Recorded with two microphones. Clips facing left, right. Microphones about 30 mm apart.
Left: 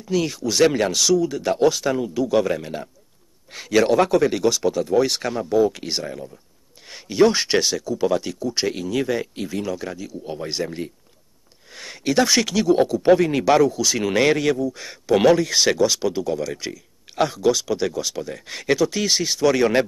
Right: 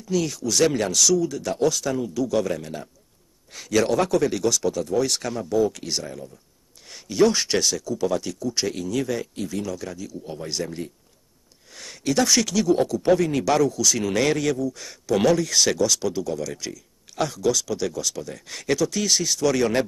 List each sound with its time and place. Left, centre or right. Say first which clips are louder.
0.0 s speech: left 2 dB; left